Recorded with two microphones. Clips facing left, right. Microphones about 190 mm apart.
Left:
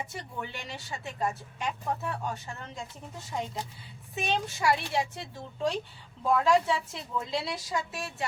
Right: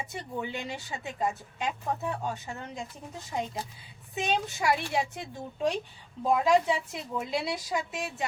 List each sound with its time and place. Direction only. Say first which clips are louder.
0.1 s a woman's voice: right 4 dB; 20° right (ahead or behind)
4.1 s a woman's voice: right 1 dB; 20° right (ahead or behind)